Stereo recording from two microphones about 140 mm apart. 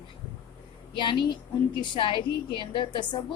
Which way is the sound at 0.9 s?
35° left (ahead or behind).